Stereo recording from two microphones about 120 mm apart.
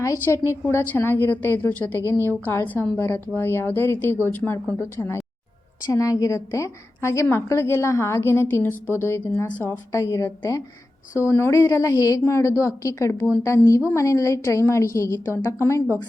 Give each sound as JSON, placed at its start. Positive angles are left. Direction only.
{"t": 0.0, "sound": "a woman's voice", "side_deg": 25}
{"t": 5.9, "sound": "a woman's voice", "side_deg": 30}